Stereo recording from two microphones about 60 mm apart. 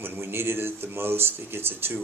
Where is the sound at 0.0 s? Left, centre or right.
Right.